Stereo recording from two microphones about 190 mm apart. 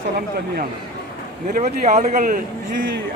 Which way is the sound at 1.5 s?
35° right (ahead or behind).